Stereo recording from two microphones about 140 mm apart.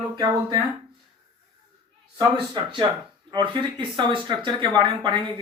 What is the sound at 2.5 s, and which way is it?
Speech, 30° right (ahead or behind).